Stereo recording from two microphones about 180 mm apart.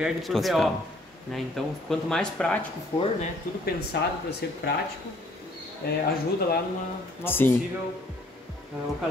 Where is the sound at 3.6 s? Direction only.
65° left (ahead or behind).